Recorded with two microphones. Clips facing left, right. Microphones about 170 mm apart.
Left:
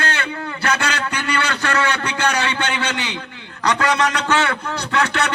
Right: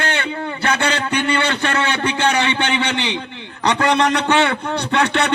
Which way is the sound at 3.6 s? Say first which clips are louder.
Right 2 dB; 25° right (ahead or behind).